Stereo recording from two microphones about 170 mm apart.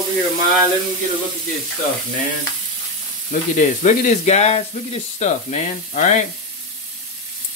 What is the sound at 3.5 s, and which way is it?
Speech, 50° left (ahead or behind).